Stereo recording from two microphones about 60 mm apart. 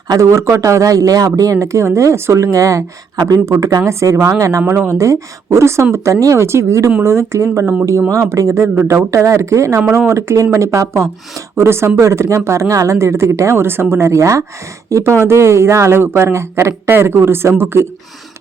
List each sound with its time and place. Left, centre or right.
0.1 s speech: right
4.6 s speech: right
16.9 s speech: right